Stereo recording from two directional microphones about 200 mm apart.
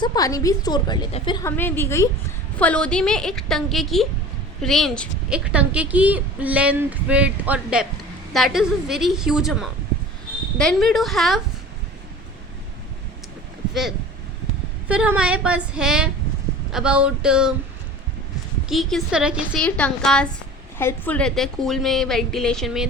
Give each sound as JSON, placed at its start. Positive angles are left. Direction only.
{"t": 0.0, "sound": "a woman's voice", "side_deg": 20}
{"t": 14.8, "sound": "a woman's voice", "side_deg": -5}
{"t": 18.7, "sound": "a woman's voice", "side_deg": 0}